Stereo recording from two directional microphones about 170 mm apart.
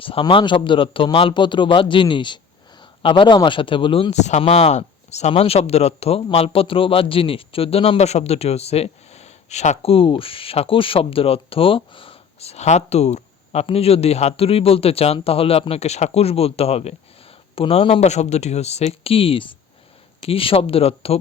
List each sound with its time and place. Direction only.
0.0 s a man's voice: 30° left (ahead or behind)
4.1 s speech: 40° left (ahead or behind)